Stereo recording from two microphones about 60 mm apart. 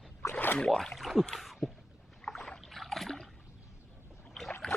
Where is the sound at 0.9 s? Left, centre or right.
Centre.